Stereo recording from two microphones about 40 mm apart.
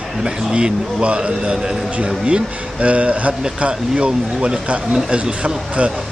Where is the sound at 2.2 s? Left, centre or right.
Right.